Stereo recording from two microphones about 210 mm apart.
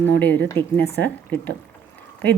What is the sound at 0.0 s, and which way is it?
Speech, 10° left (ahead or behind).